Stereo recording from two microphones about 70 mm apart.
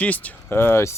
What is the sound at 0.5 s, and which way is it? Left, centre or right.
Speech, left.